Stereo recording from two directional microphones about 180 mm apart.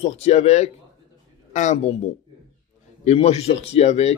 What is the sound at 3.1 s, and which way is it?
Speech, 35° left (ahead or behind).